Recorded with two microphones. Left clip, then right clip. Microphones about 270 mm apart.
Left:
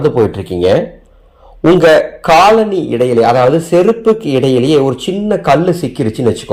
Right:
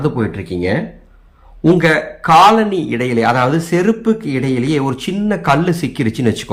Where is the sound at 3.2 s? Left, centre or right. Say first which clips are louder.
Left 3 dB; right.